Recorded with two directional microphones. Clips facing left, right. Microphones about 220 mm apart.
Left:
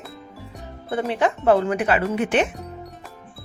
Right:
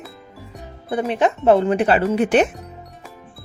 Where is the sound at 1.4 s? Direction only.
25° right (ahead or behind).